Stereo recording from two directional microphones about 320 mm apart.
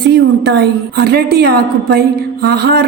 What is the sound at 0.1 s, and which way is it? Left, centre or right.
A woman's voice, right.